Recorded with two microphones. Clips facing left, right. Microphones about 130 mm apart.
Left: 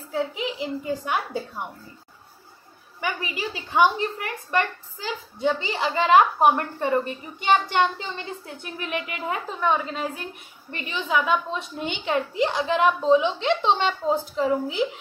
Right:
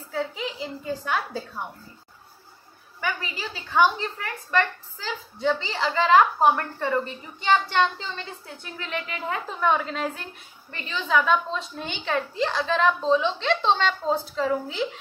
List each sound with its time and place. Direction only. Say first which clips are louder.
0.1 s a woman's voice: left 3 dB; 15° left (ahead or behind)
3.0 s a woman's voice: left 2 dB; 15° left (ahead or behind)
9.5 s a woman's voice: right 1 dB; centre (ahead or behind)